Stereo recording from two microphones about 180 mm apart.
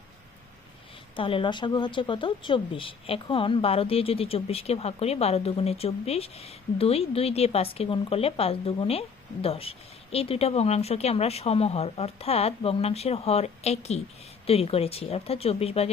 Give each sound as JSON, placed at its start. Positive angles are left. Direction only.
{"t": 1.1, "sound": "speech", "side_deg": 30}